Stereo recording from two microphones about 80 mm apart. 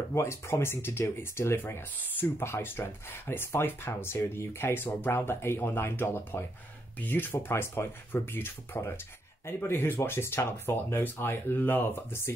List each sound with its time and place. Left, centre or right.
0.1 s speech: left